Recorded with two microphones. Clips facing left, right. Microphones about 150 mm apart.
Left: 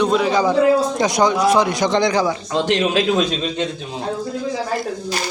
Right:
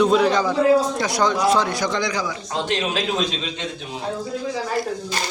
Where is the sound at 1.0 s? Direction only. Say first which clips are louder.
Left 4 dB; 15° left (ahead or behind).